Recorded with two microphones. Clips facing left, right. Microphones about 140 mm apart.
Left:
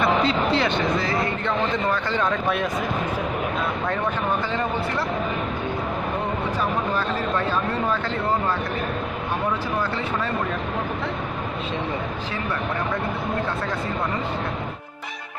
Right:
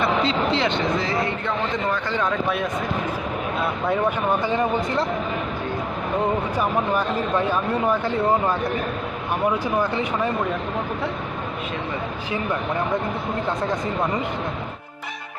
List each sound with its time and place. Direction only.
0.2 s speech: 25° right (ahead or behind)
3.8 s speech: 10° right (ahead or behind)
6.6 s speech: 15° right (ahead or behind)